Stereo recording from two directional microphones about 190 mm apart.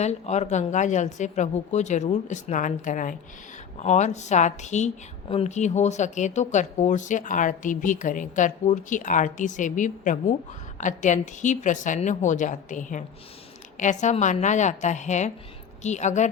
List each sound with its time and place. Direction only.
0.0 s speech: 35° left (ahead or behind)